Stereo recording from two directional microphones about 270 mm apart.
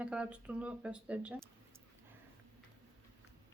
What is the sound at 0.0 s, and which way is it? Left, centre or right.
Speech, centre.